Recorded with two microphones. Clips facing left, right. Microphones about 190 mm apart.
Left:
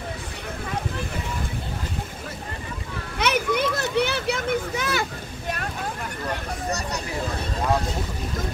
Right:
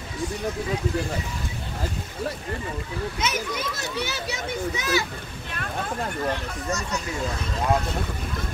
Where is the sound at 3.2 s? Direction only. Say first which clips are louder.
Left 9 dB; 60° left (ahead or behind).